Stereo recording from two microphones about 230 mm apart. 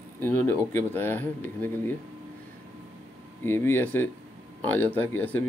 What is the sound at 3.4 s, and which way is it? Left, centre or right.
Speech, centre.